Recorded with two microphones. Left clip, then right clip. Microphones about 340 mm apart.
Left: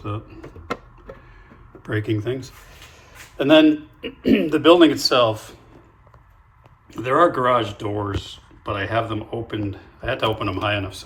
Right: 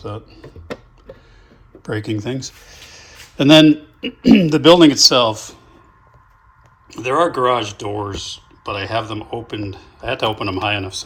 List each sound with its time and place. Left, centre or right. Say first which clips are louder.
1.8 s speech: right 1 dB; centre
6.9 s speech: even; centre